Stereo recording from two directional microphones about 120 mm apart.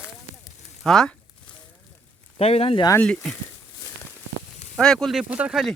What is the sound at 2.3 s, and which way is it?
Speech, 55° left (ahead or behind).